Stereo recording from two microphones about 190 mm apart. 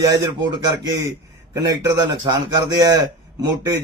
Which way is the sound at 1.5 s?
15° right (ahead or behind).